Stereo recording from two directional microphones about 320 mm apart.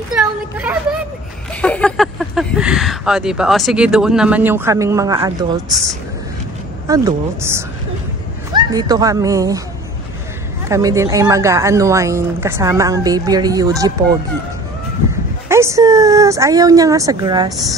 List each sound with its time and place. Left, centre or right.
0.1 s a sound: centre
1.5 s speech: centre
6.9 s speech: centre
10.7 s speech: centre
15.4 s speech: centre